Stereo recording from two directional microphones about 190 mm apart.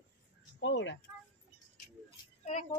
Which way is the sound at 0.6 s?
70° left (ahead or behind).